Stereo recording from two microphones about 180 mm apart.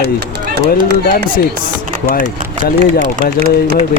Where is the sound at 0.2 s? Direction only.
65° right (ahead or behind).